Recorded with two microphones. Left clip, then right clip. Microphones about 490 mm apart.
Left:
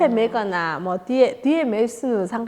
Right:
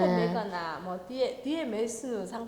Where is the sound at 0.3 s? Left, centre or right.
Left.